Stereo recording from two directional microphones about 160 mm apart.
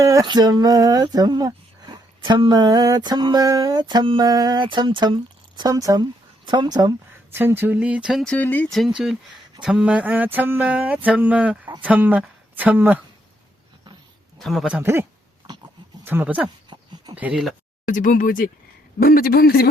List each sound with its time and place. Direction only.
0.0 s music: 20° right (ahead or behind)
7.3 s speech: 15° right (ahead or behind); by 8.9 s 5° left (ahead or behind)
9.6 s a sound: 5° right (ahead or behind)
11.8 s speech: 10° right (ahead or behind)
14.3 s speech: centre (ahead or behind)
16.0 s a sound: 10° right (ahead or behind)
17.2 s speech: 5° right (ahead or behind)
17.8 s speech: 55° left (ahead or behind)
18.9 s a man's voice: 70° left (ahead or behind)